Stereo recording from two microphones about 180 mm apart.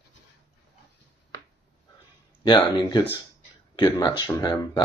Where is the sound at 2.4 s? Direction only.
25° left (ahead or behind).